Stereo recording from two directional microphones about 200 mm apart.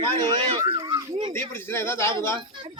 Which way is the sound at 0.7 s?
20° right (ahead or behind).